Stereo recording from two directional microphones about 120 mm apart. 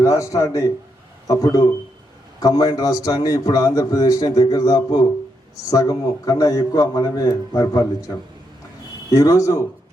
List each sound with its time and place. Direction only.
0.0 s a man's voice: 30° left (ahead or behind)
9.1 s a man's voice: 30° left (ahead or behind)